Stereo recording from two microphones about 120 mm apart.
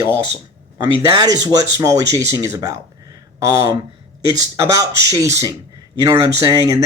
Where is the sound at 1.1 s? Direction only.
35° right (ahead or behind).